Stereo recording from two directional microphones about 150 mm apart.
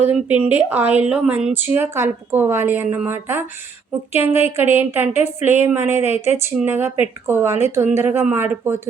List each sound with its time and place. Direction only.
0.0 s speech: 10° right (ahead or behind)
4.3 s speech: 45° left (ahead or behind)
4.5 s speech: 15° right (ahead or behind)